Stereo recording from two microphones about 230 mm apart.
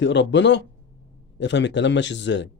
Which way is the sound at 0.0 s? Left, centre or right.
Left.